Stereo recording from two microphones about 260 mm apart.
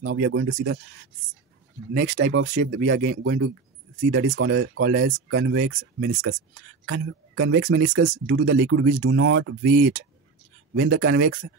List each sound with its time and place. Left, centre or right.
0.0 s speech: right
2.0 s speech: right
10.7 s speech: right